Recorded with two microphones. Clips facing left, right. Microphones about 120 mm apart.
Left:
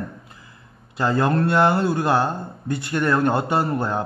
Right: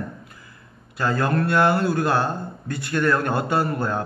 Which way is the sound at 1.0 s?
20° left (ahead or behind).